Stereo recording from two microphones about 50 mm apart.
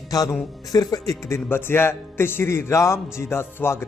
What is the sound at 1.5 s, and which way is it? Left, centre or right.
A man's voice, left.